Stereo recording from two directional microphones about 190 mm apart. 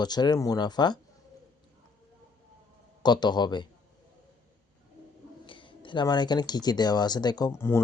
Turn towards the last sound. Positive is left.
turn(degrees=15)  # may be behind; listen again after turning